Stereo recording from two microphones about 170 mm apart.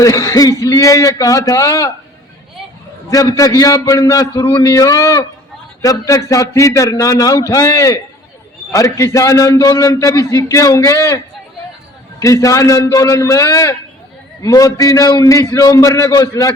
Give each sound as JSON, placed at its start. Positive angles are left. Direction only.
{"t": 0.0, "sound": "a man's voice", "side_deg": 20}
{"t": 3.1, "sound": "a man's voice", "side_deg": 20}
{"t": 12.2, "sound": "a man's voice", "side_deg": 20}